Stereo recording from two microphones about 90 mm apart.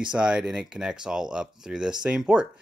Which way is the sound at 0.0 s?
10° right (ahead or behind).